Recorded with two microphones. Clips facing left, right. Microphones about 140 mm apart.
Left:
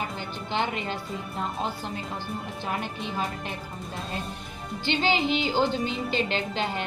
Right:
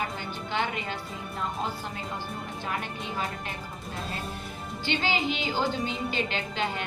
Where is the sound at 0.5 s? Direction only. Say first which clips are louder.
Left 2 dB; 25° left (ahead or behind).